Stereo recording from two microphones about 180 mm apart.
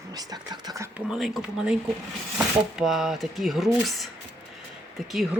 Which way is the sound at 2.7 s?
Centre (ahead or behind).